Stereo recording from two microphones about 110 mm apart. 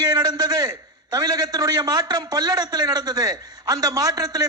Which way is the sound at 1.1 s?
35° right (ahead or behind).